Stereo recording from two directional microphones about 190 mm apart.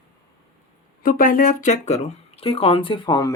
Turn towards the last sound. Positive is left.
turn(degrees=20)  # may be behind; listen again after turning